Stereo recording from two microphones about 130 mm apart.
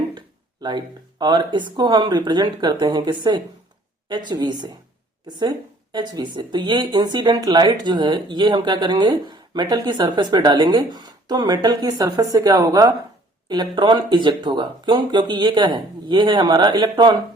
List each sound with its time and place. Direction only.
0.6 s speech: 35° right (ahead or behind)